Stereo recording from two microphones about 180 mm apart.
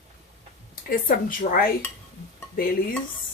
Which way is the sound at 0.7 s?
55° left (ahead or behind).